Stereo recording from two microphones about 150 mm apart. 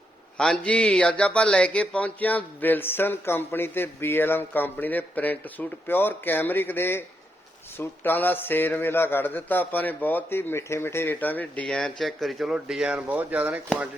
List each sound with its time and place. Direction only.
0.3 s speech: 5° left (ahead or behind); by 13.6 s 10° right (ahead or behind)